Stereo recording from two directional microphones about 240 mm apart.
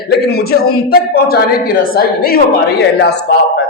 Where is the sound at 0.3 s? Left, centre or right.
Left.